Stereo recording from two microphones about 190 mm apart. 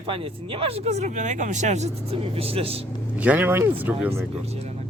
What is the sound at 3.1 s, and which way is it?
Speech, 10° right (ahead or behind).